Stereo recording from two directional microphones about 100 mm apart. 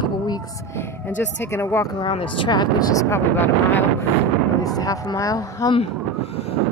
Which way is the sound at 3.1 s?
20° left (ahead or behind).